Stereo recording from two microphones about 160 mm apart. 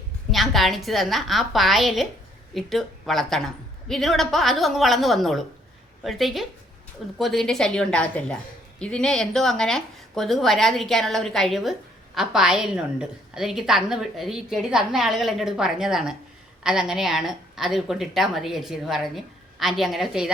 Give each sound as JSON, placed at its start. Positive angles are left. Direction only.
{"t": 0.3, "sound": "a woman's voice", "side_deg": 0}